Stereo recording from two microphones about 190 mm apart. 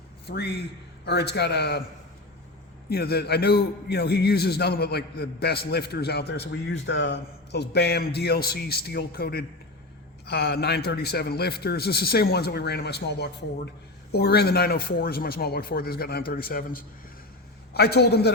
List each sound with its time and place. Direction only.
0.3 s a man's voice: 60° left (ahead or behind)
2.9 s a man's voice: 55° left (ahead or behind)